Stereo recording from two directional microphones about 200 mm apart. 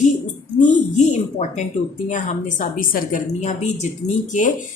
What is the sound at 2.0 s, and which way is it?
A woman's voice, 40° left (ahead or behind).